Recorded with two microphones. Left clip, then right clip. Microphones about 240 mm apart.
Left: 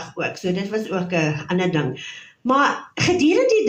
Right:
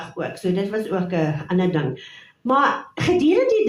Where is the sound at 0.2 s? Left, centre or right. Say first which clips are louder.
Even; left.